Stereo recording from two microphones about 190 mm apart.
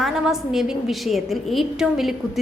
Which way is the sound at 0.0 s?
Centre (ahead or behind).